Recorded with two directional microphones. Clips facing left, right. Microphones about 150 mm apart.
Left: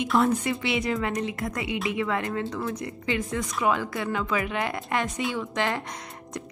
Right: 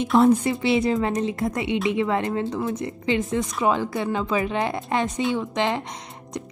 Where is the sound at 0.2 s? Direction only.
30° right (ahead or behind).